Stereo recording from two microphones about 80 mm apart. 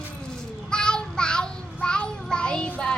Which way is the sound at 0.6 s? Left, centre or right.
Centre.